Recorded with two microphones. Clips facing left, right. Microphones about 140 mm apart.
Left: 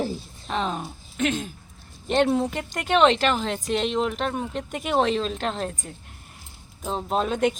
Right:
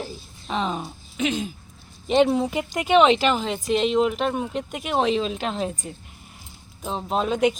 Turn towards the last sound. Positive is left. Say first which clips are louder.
# right 1 dB
turn(degrees=0)  # may be behind; listen again after turning